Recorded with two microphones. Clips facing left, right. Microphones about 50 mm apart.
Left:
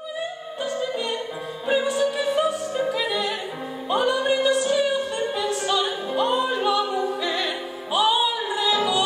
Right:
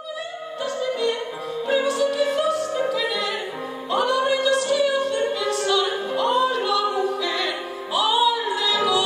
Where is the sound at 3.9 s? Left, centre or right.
Centre.